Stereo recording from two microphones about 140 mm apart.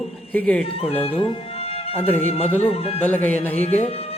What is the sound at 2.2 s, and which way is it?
Music, 45° left (ahead or behind).